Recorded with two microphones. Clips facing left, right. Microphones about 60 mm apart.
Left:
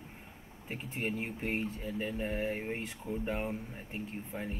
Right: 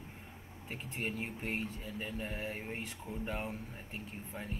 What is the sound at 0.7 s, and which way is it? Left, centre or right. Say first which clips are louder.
Speech: left 3 dB; centre.